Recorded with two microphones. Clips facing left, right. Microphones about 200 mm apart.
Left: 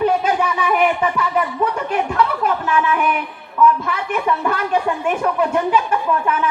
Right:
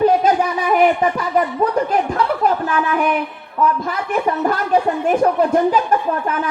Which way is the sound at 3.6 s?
35° right (ahead or behind).